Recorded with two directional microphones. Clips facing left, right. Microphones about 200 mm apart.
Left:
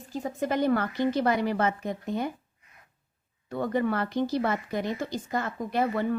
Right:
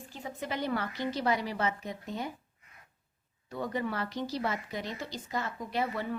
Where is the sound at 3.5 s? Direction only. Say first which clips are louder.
Left 7 dB; 55° left (ahead or behind).